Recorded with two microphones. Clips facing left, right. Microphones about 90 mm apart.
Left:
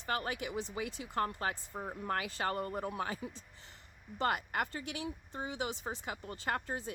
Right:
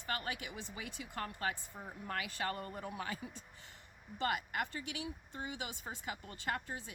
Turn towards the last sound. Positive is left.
turn(degrees=40)  # may be behind; listen again after turning